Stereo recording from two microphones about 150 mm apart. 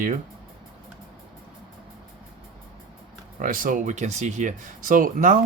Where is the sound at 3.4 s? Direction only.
65° right (ahead or behind).